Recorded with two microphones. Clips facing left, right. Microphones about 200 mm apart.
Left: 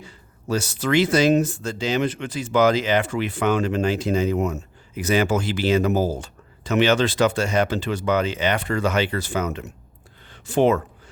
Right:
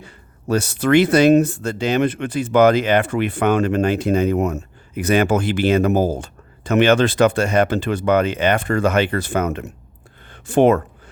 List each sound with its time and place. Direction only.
0.0 s speech: 60° right (ahead or behind)